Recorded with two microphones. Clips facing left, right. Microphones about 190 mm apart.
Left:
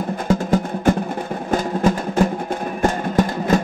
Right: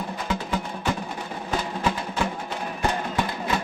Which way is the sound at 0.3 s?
45° left (ahead or behind).